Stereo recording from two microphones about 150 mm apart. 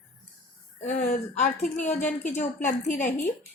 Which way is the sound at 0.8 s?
55° left (ahead or behind).